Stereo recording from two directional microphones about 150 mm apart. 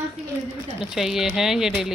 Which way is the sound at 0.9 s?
Centre (ahead or behind).